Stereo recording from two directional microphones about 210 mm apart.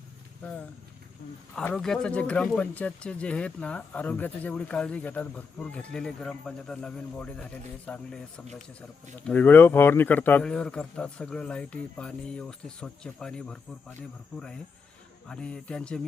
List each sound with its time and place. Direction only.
1.5 s speech: 5° left (ahead or behind)